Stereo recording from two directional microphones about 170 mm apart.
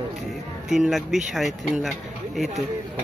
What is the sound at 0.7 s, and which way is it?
Speech, centre (ahead or behind).